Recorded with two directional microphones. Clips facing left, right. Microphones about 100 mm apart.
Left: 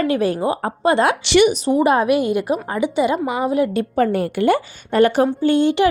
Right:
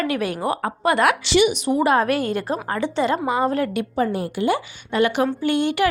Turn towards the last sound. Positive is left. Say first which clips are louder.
# left 4 dB
turn(degrees=25)  # may be behind; listen again after turning